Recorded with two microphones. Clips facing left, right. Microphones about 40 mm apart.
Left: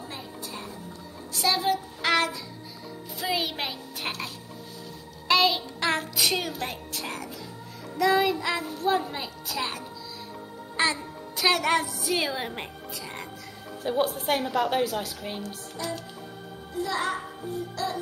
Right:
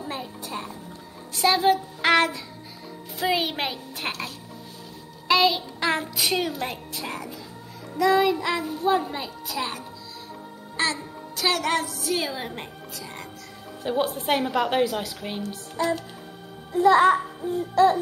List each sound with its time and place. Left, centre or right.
0.1 s music: right
1.4 s a woman's voice: right
5.3 s a child's voice: centre
13.8 s a woman's voice: centre
16.7 s music: right